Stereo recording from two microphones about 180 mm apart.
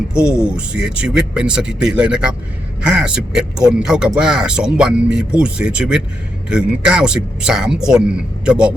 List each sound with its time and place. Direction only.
0.1 s speech: 5° right (ahead or behind)